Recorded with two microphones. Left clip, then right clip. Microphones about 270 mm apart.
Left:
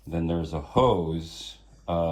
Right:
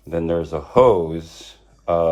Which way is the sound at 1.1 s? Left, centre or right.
Centre.